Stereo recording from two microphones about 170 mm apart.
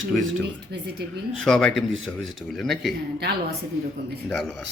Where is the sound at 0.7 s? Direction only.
75° right (ahead or behind).